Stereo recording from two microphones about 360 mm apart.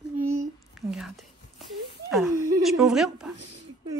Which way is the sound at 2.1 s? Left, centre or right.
Centre.